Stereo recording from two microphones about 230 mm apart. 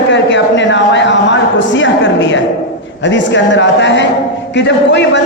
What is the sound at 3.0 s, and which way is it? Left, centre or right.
A man's voice, left.